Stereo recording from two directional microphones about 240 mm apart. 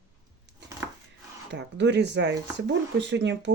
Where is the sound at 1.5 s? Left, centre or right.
Right.